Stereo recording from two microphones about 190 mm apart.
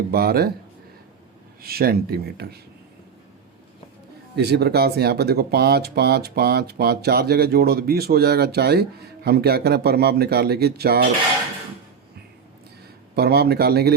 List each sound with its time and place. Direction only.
0.1 s speech: 50° right (ahead or behind)
1.6 s speech: 50° right (ahead or behind)
4.4 s speech: 60° right (ahead or behind)
13.1 s speech: 55° right (ahead or behind)